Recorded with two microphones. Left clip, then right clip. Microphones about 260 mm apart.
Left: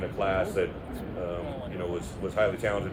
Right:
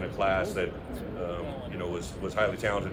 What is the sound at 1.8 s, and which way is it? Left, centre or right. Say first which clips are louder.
Speech: left 1 dB; right.